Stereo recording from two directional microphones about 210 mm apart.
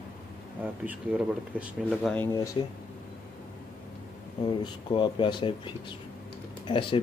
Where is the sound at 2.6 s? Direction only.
25° left (ahead or behind).